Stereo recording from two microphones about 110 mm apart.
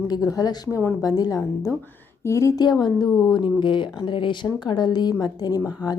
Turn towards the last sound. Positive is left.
turn(degrees=35)  # may be behind; listen again after turning